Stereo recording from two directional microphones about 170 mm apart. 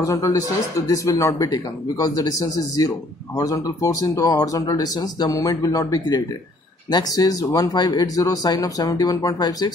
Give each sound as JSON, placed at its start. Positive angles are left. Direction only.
{"t": 0.0, "sound": "speech", "side_deg": 20}